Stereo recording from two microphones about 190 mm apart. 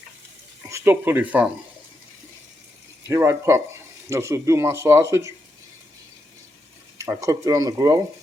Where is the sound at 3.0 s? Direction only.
15° right (ahead or behind).